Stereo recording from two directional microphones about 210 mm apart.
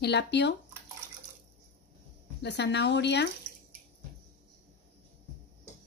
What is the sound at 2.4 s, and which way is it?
Speech, 55° left (ahead or behind).